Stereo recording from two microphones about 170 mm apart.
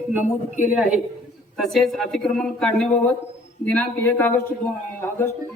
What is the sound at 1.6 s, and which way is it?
A man's voice, centre (ahead or behind).